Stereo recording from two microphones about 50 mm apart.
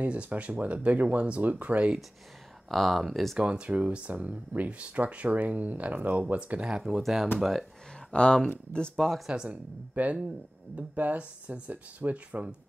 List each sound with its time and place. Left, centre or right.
0.0 s speech: right
2.7 s speech: centre
3.3 s speech: right
7.0 s speech: centre
8.1 s speech: centre
9.3 s speech: right
10.0 s speech: right